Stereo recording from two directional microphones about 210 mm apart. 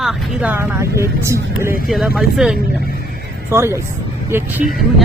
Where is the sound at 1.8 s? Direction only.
Centre (ahead or behind).